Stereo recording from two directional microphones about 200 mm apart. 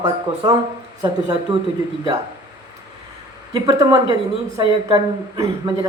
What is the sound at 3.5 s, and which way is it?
Speech, 20° right (ahead or behind).